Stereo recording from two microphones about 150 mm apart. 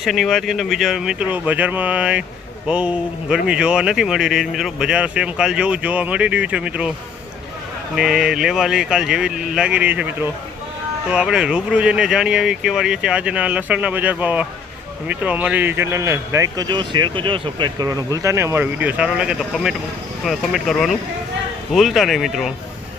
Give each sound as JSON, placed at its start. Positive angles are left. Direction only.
{"t": 0.0, "sound": "speech", "side_deg": 0}
{"t": 7.9, "sound": "speech", "side_deg": -5}